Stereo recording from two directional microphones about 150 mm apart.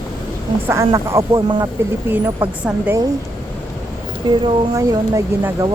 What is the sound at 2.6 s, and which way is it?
Speech, 10° right (ahead or behind).